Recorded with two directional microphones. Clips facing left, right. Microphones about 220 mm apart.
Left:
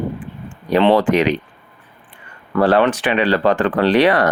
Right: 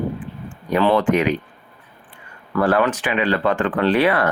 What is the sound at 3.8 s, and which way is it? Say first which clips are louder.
Speech: left 3 dB; 80° left.